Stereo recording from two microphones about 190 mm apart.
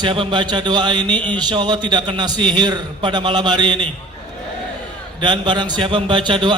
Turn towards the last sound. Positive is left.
turn(degrees=-25)  # may be behind; listen again after turning